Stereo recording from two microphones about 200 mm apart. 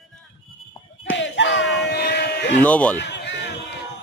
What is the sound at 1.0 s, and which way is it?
Bellow, 65° left (ahead or behind).